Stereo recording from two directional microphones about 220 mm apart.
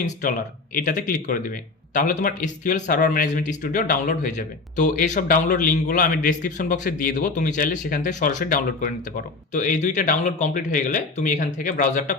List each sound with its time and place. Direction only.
0.0 s speech: 35° left (ahead or behind)